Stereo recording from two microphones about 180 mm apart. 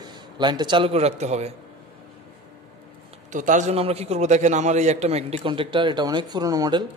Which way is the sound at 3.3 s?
45° right (ahead or behind).